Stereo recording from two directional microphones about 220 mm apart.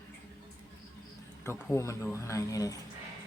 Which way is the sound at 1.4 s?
10° left (ahead or behind).